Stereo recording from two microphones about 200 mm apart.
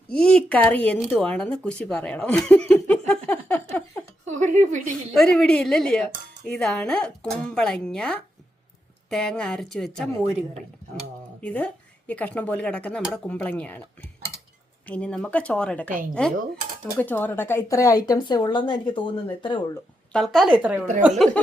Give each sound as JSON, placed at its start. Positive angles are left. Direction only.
{"t": 0.1, "sound": "speech", "side_deg": 5}
{"t": 3.1, "sound": "a sound", "side_deg": 5}
{"t": 4.3, "sound": "a sound", "side_deg": -40}
{"t": 5.1, "sound": "speech", "side_deg": 5}
{"t": 14.8, "sound": "speech", "side_deg": 5}
{"t": 15.9, "sound": "a woman's voice", "side_deg": -45}
{"t": 17.0, "sound": "speech", "side_deg": 10}
{"t": 20.1, "sound": "speech", "side_deg": 0}